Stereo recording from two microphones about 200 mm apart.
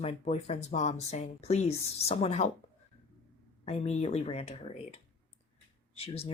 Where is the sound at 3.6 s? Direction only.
35° left (ahead or behind).